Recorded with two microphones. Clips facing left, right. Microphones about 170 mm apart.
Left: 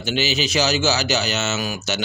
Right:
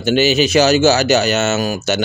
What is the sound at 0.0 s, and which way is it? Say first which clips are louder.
Speech: right 9 dB; 50° right (ahead or behind).